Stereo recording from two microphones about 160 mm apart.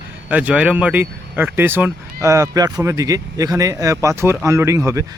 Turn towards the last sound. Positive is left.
turn(degrees=-20)  # may be behind; listen again after turning